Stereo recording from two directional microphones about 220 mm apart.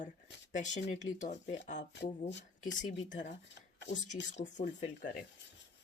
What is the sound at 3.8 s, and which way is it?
Speech, 35° left (ahead or behind).